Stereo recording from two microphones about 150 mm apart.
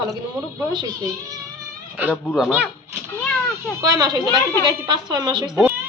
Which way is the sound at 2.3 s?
5° right (ahead or behind).